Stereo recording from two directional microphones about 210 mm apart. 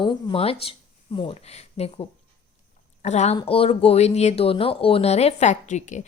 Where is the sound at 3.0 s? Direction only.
30° left (ahead or behind).